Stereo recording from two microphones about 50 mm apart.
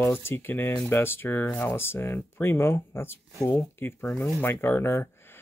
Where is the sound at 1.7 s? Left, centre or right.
Left.